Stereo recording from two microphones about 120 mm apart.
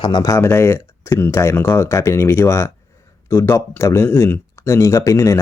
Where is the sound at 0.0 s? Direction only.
35° left (ahead or behind).